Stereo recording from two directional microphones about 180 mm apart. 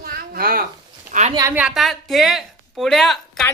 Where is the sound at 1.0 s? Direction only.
40° right (ahead or behind).